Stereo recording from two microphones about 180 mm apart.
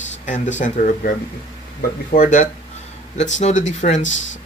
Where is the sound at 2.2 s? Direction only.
45° left (ahead or behind).